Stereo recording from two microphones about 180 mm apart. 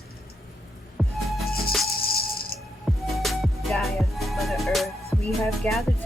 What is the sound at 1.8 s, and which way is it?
Music, 60° left (ahead or behind).